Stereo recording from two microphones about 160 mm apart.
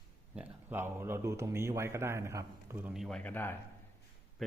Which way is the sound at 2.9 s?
Centre (ahead or behind).